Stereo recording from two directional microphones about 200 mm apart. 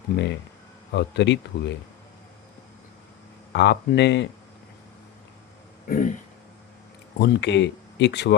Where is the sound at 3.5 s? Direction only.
60° left (ahead or behind).